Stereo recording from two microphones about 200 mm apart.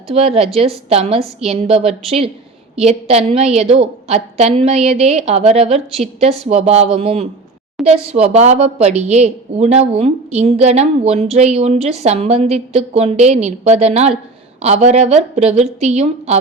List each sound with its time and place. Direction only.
0.1 s a woman's voice: 30° right (ahead or behind)